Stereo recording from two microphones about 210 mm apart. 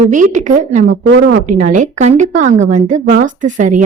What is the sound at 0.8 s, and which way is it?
Speech, 55° right (ahead or behind).